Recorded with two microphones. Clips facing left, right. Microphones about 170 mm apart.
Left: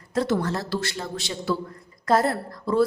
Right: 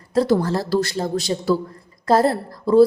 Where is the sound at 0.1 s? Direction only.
35° right (ahead or behind).